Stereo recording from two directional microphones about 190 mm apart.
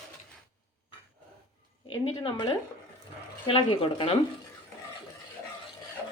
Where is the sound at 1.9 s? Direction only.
25° left (ahead or behind).